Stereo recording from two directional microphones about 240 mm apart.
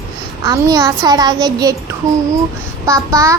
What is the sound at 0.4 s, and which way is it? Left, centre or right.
Child singing, centre.